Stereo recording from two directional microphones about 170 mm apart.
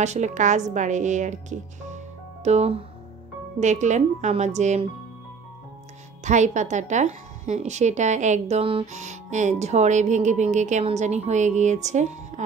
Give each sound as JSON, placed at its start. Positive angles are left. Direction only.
{"t": 0.0, "sound": "speech", "side_deg": -45}
{"t": 6.2, "sound": "speech", "side_deg": -45}